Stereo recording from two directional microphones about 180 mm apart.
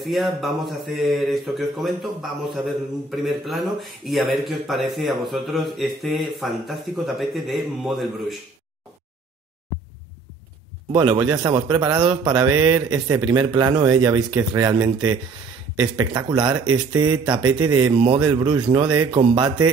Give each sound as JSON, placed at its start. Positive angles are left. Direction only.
{"t": 0.0, "sound": "a man's voice", "side_deg": 0}
{"t": 10.9, "sound": "speech", "side_deg": -25}
{"t": 16.0, "sound": "speech", "side_deg": -25}